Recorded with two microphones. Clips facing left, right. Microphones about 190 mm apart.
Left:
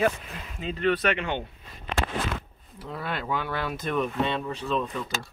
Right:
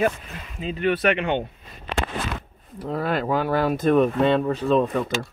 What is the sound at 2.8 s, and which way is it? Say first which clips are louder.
Speech: right 9 dB; 45° right (ahead or behind).